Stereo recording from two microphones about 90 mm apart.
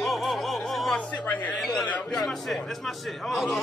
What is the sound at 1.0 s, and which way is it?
Speech, 15° left (ahead or behind).